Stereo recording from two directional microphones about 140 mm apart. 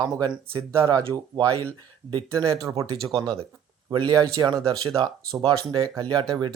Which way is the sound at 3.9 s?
30° right (ahead or behind).